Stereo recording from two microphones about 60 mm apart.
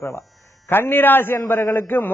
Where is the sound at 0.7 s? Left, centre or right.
Left.